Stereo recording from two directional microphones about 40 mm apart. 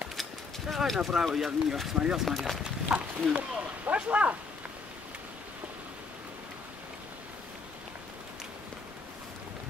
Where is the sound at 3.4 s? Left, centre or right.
Right.